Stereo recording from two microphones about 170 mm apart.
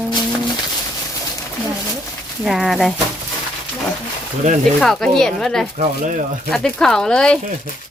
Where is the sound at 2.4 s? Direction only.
Centre (ahead or behind).